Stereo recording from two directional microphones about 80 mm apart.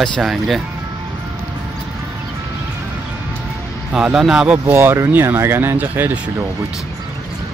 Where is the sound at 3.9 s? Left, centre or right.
Centre.